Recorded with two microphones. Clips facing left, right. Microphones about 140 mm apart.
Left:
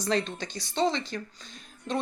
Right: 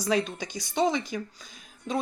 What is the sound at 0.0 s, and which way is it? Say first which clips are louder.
Speech: right 2 dB; 10° right (ahead or behind).